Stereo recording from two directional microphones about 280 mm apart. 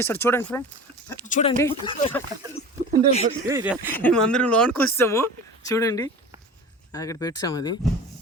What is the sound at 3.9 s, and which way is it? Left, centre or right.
Speech, centre.